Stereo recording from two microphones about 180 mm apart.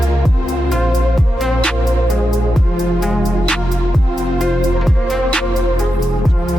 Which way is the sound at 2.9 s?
Centre (ahead or behind).